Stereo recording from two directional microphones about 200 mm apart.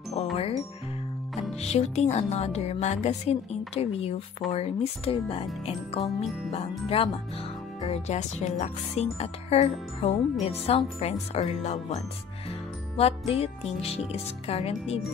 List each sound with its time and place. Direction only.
0.1 s music: 30° left (ahead or behind)
1.6 s speech: 35° left (ahead or behind)
7.8 s speech: 35° left (ahead or behind)
12.4 s music: 30° left (ahead or behind)